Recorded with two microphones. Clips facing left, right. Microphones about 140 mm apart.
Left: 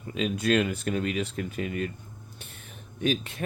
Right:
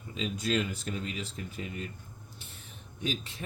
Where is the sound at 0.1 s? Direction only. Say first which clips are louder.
Left 6 dB; 65° left (ahead or behind).